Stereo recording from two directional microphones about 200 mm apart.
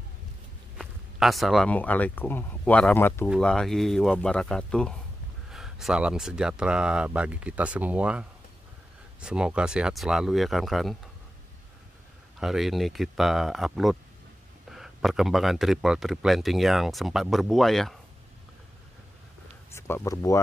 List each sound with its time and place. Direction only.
0.7 s speech: centre (ahead or behind)
12.4 s speech: centre (ahead or behind)
19.7 s speech: 10° left (ahead or behind)